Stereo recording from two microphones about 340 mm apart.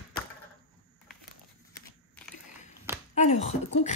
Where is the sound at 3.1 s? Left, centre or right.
Centre.